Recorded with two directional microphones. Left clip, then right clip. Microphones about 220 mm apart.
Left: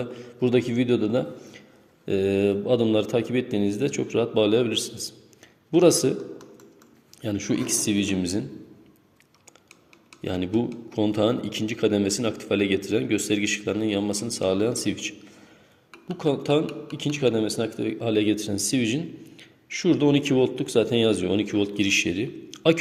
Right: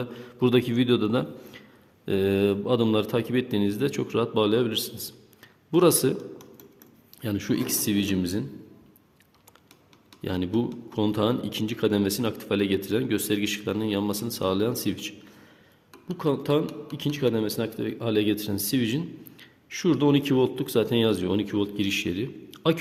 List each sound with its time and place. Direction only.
0.0 s speech: 20° right (ahead or behind)
7.2 s speech: 20° right (ahead or behind)
10.2 s speech: 15° right (ahead or behind)
16.1 s speech: 15° right (ahead or behind)